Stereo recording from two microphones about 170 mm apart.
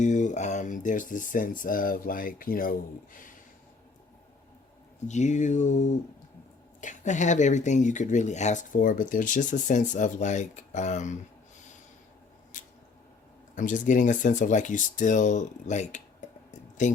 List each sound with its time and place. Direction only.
0.0 s speech: 45° left (ahead or behind)
5.0 s speech: 45° left (ahead or behind)
12.5 s squish: 50° left (ahead or behind)
13.6 s speech: 50° left (ahead or behind)